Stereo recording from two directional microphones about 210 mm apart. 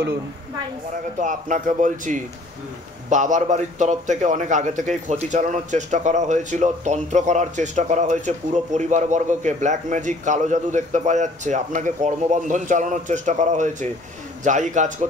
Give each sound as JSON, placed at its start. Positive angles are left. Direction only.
{"t": 1.2, "sound": "a man's voice", "side_deg": -35}